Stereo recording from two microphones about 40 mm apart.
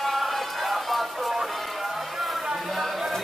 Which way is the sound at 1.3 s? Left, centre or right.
Centre.